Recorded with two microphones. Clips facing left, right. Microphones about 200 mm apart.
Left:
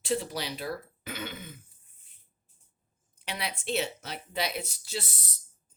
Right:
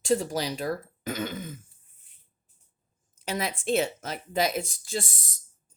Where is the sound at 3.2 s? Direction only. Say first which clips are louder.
Right 6 dB; 45° right (ahead or behind).